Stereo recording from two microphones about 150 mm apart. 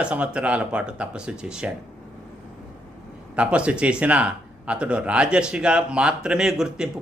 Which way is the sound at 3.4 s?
10° right (ahead or behind).